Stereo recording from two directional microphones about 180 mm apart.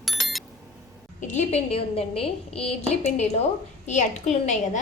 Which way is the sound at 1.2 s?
40° left (ahead or behind).